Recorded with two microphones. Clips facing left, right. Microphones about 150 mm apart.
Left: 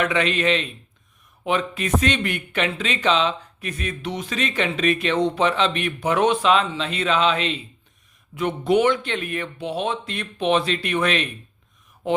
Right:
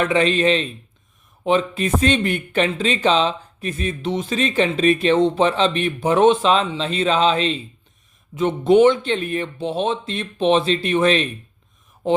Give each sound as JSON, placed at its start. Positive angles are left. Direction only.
{"t": 0.0, "sound": "speech", "side_deg": -35}